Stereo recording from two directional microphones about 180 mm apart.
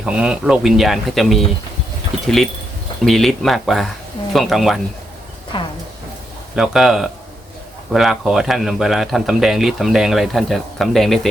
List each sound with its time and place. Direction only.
0.0 s speech: 5° right (ahead or behind)
5.5 s a sound: 30° left (ahead or behind)
6.6 s speech: centre (ahead or behind)